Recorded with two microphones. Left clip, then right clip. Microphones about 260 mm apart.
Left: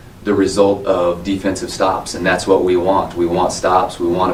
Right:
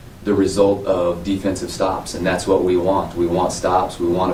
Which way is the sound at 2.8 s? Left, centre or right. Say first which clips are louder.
Left 3 dB; left.